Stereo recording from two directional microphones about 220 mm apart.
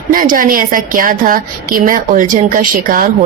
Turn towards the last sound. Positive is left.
turn(degrees=-40)  # may be behind; listen again after turning